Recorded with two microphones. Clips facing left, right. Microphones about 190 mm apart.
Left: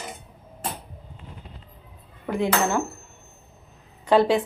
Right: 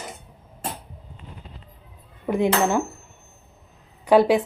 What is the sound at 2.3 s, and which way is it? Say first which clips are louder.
Dishes: right 3 dB; 20° right (ahead or behind).